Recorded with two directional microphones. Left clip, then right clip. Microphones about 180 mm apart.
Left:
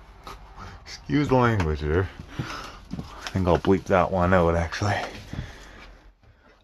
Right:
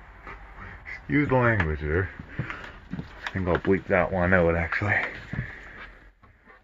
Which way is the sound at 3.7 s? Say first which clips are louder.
Even; 30° left (ahead or behind).